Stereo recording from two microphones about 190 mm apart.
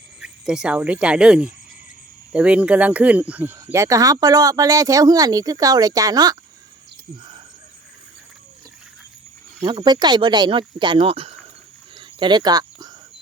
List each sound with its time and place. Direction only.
0.2 s speech: 5° right (ahead or behind); by 6.3 s 20° right (ahead or behind)
9.6 s speech: 20° right (ahead or behind)
11.9 s cricket: 25° right (ahead or behind)